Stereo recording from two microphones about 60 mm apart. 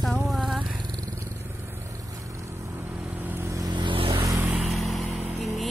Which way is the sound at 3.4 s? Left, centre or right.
Right.